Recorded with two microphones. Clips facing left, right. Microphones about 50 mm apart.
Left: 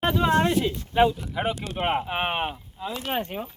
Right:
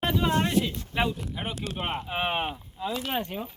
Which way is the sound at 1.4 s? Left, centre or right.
Left.